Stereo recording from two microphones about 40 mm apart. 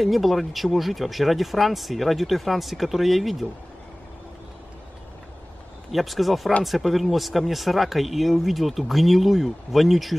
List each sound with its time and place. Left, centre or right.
0.0 s speech: centre
5.9 s speech: centre